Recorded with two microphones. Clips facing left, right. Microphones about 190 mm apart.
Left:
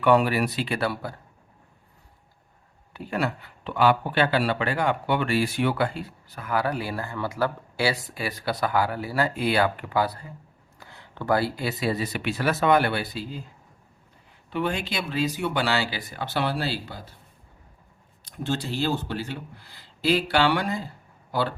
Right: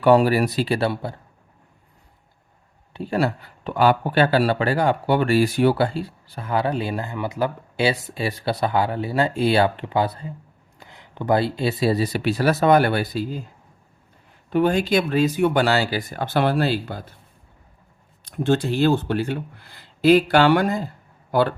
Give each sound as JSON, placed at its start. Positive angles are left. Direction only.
{"t": 0.0, "sound": "speech", "side_deg": -35}
{"t": 2.9, "sound": "speech", "side_deg": -30}
{"t": 14.5, "sound": "speech", "side_deg": -40}
{"t": 18.3, "sound": "speech", "side_deg": -55}